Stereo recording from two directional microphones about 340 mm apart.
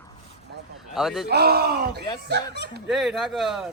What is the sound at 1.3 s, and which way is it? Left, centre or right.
A man's voice, right.